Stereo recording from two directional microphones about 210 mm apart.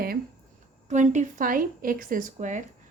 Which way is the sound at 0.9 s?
35° right (ahead or behind).